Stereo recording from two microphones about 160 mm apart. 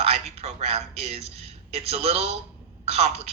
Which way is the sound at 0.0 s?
40° right (ahead or behind).